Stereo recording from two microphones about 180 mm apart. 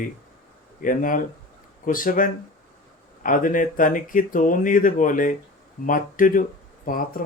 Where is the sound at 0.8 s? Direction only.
50° left (ahead or behind).